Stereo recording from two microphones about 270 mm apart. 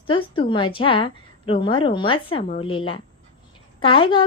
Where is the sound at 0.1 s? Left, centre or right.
Centre.